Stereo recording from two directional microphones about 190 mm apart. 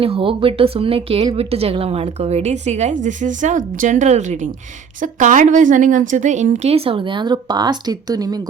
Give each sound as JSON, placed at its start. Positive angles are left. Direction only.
{"t": 0.0, "sound": "speech", "side_deg": -30}